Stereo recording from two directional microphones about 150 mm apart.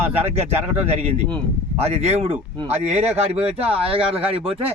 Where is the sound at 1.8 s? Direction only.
45° right (ahead or behind).